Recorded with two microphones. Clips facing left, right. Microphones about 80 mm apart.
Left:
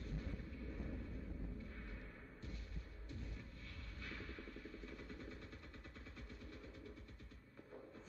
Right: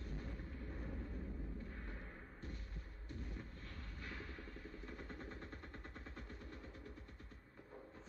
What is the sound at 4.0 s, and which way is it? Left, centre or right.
Vehicle, right.